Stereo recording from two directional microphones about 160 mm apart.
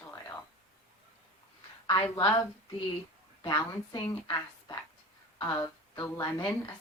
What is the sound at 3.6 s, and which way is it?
A woman's voice, 25° left (ahead or behind).